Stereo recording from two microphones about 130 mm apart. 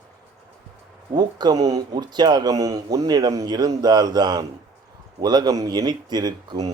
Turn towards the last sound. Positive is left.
turn(degrees=-30)  # may be behind; listen again after turning